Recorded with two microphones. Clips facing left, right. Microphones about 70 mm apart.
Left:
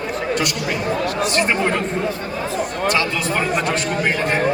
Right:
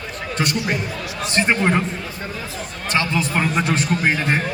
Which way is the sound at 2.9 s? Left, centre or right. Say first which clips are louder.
Right 4 dB; right.